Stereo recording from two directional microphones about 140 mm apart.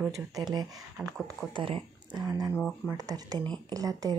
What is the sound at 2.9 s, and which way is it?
Speech, 25° right (ahead or behind).